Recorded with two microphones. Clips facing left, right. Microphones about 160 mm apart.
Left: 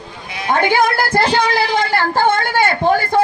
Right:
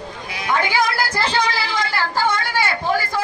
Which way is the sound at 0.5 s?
55° left (ahead or behind).